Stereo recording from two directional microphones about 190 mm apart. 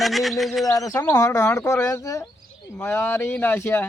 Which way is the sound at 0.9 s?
15° left (ahead or behind).